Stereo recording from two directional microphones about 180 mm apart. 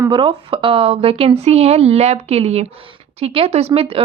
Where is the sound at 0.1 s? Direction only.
30° right (ahead or behind).